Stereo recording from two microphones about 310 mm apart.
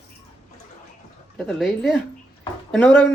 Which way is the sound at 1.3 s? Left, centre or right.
Centre.